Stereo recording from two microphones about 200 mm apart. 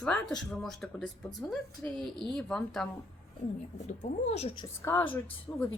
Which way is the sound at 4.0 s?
35° left (ahead or behind).